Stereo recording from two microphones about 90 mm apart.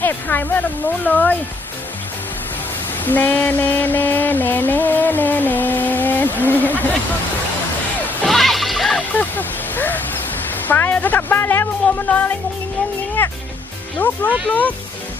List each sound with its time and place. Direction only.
0.0 s speech: 20° left (ahead or behind)
3.0 s music: 20° left (ahead or behind)
8.3 s music: centre (ahead or behind)
9.0 s a sound: 20° left (ahead or behind)
10.7 s speech: 20° left (ahead or behind)